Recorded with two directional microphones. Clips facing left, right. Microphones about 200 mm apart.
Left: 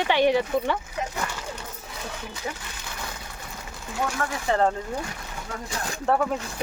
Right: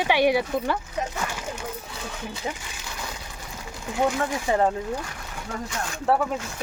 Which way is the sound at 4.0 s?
15° right (ahead or behind).